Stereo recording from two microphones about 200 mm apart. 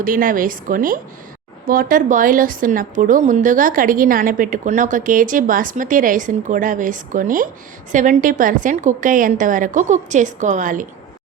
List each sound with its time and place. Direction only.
0.0 s a woman's voice: 45° right (ahead or behind)